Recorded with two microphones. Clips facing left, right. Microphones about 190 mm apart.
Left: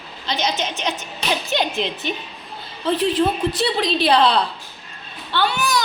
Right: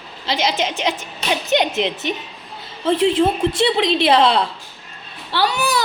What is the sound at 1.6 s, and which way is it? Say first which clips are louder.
Speech: right 3 dB; 75° right (ahead or behind).